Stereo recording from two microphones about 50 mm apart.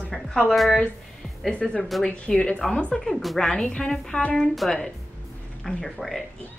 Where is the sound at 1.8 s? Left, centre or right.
Centre.